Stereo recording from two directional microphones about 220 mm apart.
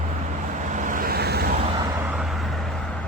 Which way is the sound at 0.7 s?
35° right (ahead or behind).